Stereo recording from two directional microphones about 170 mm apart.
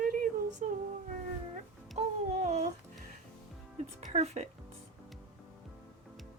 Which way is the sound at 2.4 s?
45° right (ahead or behind).